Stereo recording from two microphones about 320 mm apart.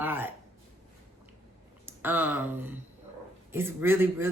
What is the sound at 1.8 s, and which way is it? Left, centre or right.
Speech, centre.